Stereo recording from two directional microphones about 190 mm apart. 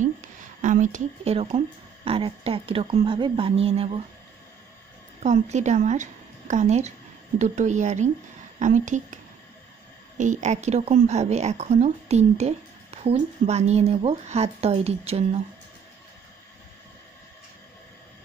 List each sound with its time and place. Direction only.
0.0 s a sound: 40° right (ahead or behind)
2.0 s speech: 30° right (ahead or behind)
5.2 s a woman's voice: 40° right (ahead or behind)